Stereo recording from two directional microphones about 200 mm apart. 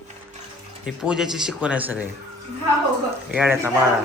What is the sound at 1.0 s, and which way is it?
A man's voice, centre (ahead or behind).